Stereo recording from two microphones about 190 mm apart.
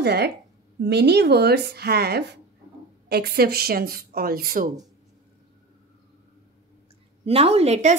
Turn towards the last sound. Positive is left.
turn(degrees=-35)  # may be behind; listen again after turning